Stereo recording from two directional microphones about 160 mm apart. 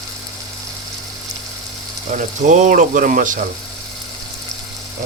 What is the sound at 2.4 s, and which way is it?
Speech, 50° right (ahead or behind).